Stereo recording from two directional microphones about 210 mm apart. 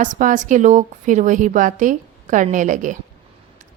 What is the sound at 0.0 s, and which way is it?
Speech, 40° right (ahead or behind).